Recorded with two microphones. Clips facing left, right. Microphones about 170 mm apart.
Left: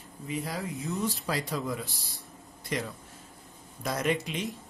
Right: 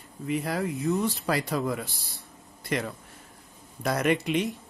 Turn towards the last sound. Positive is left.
turn(degrees=-65)  # may be behind; listen again after turning